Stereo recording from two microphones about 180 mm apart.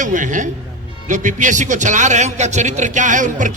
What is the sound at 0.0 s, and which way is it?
A man's voice, 45° right (ahead or behind).